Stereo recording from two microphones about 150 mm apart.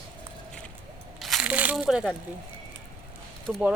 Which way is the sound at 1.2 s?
Centre (ahead or behind).